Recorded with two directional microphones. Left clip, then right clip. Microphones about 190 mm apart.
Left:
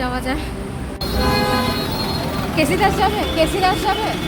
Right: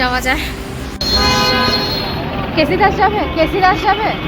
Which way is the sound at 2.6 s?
5° right (ahead or behind).